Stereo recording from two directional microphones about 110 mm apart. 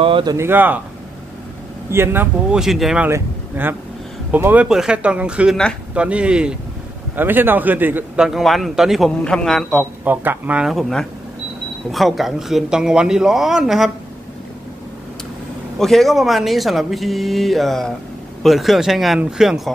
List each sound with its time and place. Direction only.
0.0 s speech: 50° right (ahead or behind)
0.4 s speech: 20° right (ahead or behind)
1.9 s speech: 20° right (ahead or behind)
2.5 s speech: 5° right (ahead or behind)
3.1 s speech: 20° right (ahead or behind)
8.2 s speech: centre (ahead or behind)
10.0 s speech: 15° right (ahead or behind)
10.7 s speech: centre (ahead or behind)
15.8 s speech: centre (ahead or behind)